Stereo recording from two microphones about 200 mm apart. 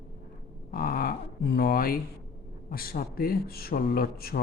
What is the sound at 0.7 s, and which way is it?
Speech, 45° left (ahead or behind).